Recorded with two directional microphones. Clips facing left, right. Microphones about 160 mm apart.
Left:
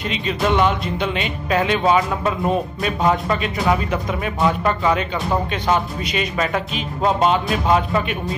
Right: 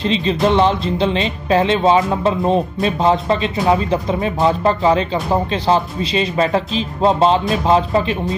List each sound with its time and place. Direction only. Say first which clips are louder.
0.0 s speech: right 5 dB; 30° right (ahead or behind)